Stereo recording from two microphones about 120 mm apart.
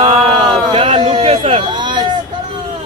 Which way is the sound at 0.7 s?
50° right (ahead or behind).